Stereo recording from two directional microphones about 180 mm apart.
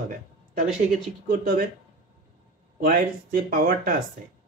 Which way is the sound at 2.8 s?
55° right (ahead or behind).